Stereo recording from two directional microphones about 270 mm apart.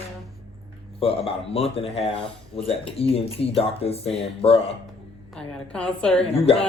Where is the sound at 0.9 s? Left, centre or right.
Left.